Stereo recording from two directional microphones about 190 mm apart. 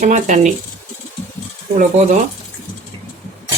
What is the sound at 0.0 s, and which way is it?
Speech, 40° right (ahead or behind).